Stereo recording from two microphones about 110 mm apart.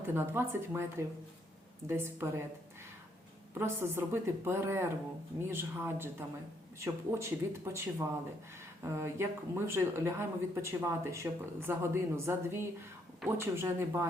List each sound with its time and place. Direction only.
0.0 s speech: 20° right (ahead or behind)
3.5 s speech: 20° right (ahead or behind)